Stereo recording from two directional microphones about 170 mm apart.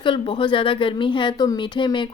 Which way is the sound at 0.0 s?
30° left (ahead or behind).